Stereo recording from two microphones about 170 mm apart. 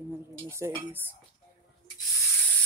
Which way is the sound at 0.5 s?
15° right (ahead or behind).